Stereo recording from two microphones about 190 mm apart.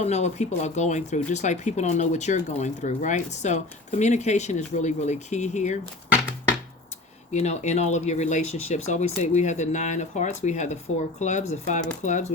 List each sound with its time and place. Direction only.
0.0 s speech: 35° left (ahead or behind)
7.3 s speech: 35° left (ahead or behind)